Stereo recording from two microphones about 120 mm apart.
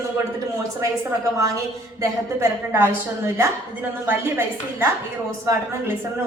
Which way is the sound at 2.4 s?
20° right (ahead or behind).